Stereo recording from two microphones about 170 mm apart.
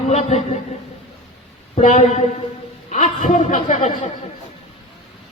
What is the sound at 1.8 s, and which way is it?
A man's voice, 45° left (ahead or behind).